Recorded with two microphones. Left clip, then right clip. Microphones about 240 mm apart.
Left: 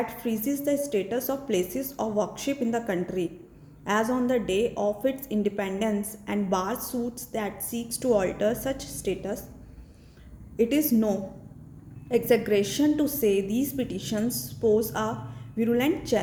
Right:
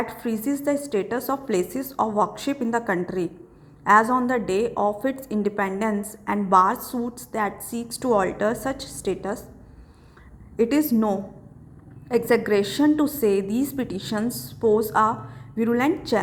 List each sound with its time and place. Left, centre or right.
0.2 s a woman's voice: centre
10.6 s a woman's voice: centre